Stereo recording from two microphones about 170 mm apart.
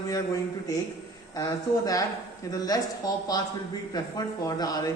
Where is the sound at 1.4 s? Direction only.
20° left (ahead or behind).